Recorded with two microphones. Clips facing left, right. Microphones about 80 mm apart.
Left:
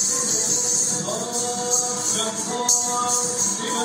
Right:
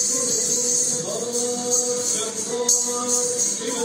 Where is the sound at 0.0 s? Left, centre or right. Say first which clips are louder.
Right 2 dB; left.